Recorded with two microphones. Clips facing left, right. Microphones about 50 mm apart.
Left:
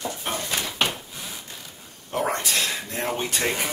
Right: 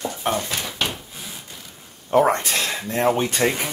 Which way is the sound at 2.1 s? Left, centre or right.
Right.